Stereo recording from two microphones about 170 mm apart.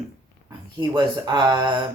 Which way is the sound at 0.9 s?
25° right (ahead or behind).